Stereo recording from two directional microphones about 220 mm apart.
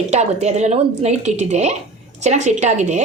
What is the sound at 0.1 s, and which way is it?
A woman's voice, 30° right (ahead or behind).